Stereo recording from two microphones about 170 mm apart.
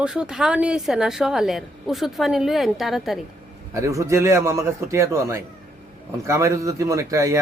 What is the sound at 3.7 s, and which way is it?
Speech, 20° right (ahead or behind).